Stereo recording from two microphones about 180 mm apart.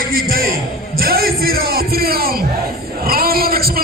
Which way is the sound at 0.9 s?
55° right (ahead or behind).